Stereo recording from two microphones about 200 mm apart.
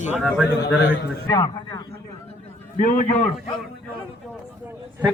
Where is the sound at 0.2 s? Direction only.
Centre (ahead or behind).